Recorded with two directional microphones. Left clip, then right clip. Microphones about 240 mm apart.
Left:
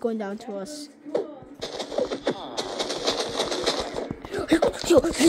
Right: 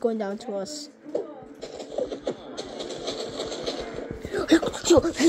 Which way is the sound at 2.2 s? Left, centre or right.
Left.